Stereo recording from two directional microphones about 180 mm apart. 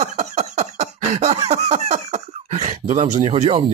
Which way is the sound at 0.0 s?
40° right (ahead or behind).